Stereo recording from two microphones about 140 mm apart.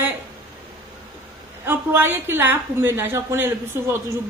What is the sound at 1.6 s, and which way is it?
A woman's voice, 15° right (ahead or behind).